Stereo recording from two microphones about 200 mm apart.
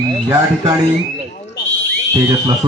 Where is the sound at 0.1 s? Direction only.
20° right (ahead or behind).